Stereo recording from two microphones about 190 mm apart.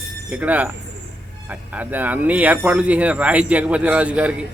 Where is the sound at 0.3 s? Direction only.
10° right (ahead or behind).